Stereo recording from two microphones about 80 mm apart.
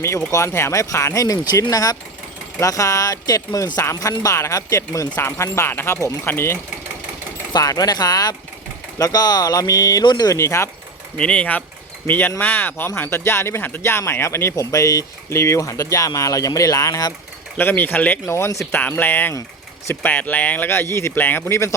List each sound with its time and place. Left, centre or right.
0.3 s speech: left
5.1 s speech: left
7.5 s speech: left
10.3 s speech: left
11.2 s speech: centre; by 14.5 s left
14.5 s speech: left
17.6 s speech: left
18.3 s speech: left
18.6 s speech: left